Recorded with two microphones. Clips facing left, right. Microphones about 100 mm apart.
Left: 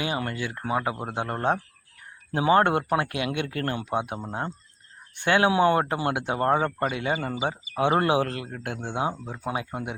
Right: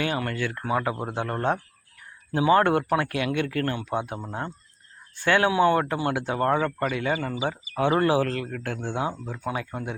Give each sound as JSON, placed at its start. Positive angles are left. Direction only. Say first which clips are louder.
{"t": 0.0, "sound": "speech", "louder": "right 2 dB", "side_deg": 20}